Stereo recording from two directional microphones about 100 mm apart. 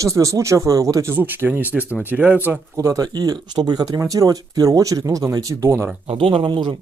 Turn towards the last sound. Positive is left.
turn(degrees=-50)  # may be behind; listen again after turning